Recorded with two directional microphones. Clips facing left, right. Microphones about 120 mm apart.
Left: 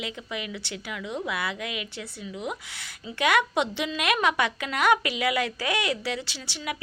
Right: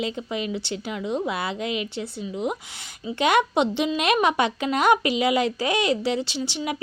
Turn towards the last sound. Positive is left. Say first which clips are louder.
# right 7 dB
turn(degrees=-25)  # may be behind; listen again after turning